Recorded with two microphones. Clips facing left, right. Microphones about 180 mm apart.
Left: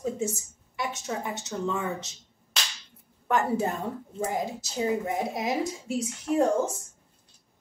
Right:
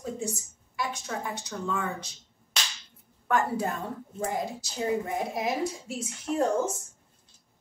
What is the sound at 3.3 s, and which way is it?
Speech, 25° left (ahead or behind).